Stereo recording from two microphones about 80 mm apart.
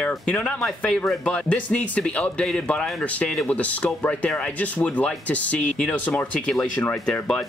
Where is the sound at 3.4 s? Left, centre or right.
Centre.